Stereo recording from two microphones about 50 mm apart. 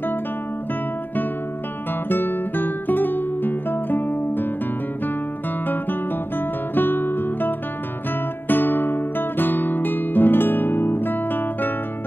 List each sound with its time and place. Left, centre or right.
2.0 s music: left
5.7 s guitar: left